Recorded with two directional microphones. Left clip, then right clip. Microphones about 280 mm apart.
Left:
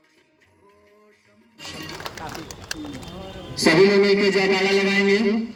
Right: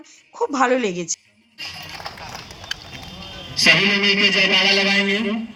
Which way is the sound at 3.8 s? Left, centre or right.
Centre.